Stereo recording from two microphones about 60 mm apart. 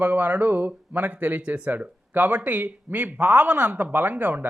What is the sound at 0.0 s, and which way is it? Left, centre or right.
Speech, right.